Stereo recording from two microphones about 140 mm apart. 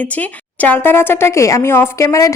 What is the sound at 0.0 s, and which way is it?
A woman's voice, 10° left (ahead or behind).